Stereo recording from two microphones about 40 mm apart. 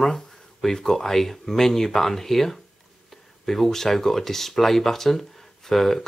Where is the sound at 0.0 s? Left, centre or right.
Centre.